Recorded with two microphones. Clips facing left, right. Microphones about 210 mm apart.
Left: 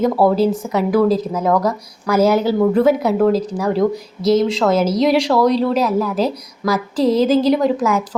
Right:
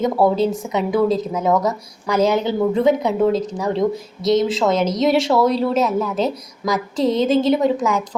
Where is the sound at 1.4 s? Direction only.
20° right (ahead or behind).